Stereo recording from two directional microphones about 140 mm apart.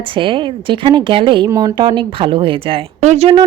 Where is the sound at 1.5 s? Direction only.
25° right (ahead or behind).